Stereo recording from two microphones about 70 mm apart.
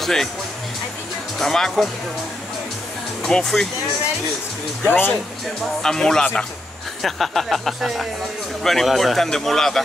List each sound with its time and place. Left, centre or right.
0.0 s speech: centre
1.4 s speech: centre
3.2 s speech: centre
4.8 s speech: left
5.8 s a man's voice: centre